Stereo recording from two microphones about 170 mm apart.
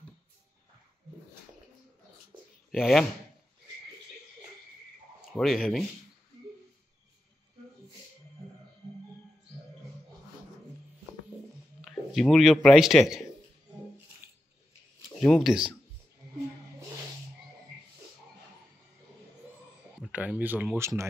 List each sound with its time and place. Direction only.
2.3 s a sound: 30° right (ahead or behind)
2.7 s speech: centre (ahead or behind)
5.3 s speech: centre (ahead or behind)
11.8 s speech: centre (ahead or behind)
15.1 s speech: centre (ahead or behind)
20.0 s speech: 5° right (ahead or behind)